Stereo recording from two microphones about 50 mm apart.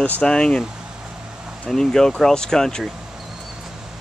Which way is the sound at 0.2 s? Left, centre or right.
Centre.